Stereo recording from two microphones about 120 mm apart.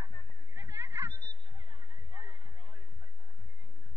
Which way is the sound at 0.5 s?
35° right (ahead or behind).